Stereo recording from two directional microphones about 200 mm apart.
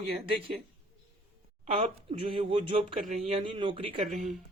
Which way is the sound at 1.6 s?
30° right (ahead or behind).